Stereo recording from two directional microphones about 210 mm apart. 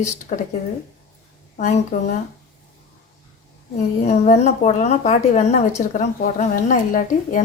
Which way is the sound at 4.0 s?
30° left (ahead or behind).